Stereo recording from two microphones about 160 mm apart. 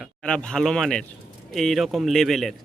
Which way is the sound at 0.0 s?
5° left (ahead or behind).